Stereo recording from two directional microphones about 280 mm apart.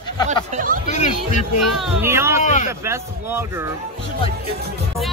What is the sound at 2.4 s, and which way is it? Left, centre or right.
Speech, left.